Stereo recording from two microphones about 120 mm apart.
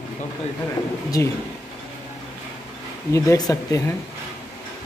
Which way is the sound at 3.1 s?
30° left (ahead or behind).